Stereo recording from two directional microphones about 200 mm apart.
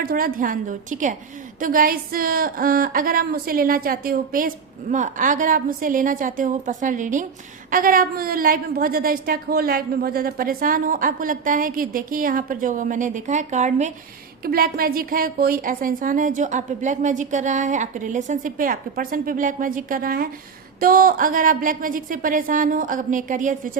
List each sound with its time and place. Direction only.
0.0 s a woman's voice: 45° right (ahead or behind)
14.4 s a woman's voice: 50° right (ahead or behind)